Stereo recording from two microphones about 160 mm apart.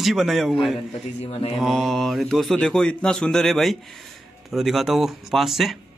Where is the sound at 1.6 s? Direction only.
Centre (ahead or behind).